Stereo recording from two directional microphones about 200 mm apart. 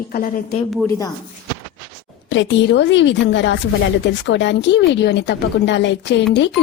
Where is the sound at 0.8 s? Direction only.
15° left (ahead or behind).